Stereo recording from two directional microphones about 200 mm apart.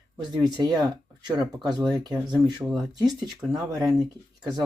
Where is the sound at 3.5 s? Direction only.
20° right (ahead or behind).